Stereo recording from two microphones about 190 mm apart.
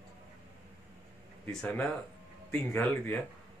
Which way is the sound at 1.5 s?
5° left (ahead or behind).